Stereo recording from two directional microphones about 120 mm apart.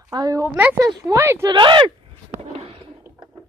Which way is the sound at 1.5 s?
40° right (ahead or behind).